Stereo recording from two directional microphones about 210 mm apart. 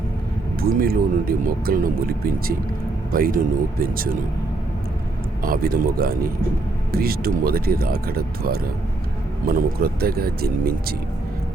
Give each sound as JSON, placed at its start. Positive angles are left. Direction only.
{"t": 0.6, "sound": "speech", "side_deg": -45}
{"t": 5.4, "sound": "speech", "side_deg": -45}